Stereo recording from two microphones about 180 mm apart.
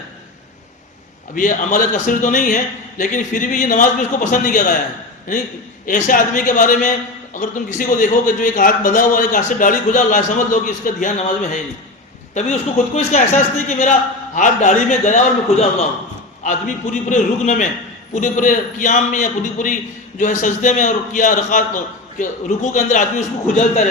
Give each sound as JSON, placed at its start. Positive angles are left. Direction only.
{"t": 1.4, "sound": "a man's voice", "side_deg": 45}
{"t": 5.8, "sound": "a man's voice", "side_deg": 45}
{"t": 12.3, "sound": "a man's voice", "side_deg": 40}